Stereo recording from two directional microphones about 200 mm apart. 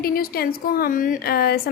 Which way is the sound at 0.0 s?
50° left (ahead or behind).